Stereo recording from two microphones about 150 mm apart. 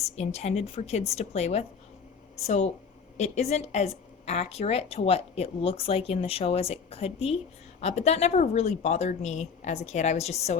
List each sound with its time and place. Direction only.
0.0 s a woman's voice: 45° left (ahead or behind)